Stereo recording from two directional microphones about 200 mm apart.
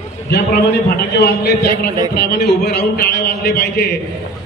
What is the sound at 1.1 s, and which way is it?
A man's voice, 50° left (ahead or behind).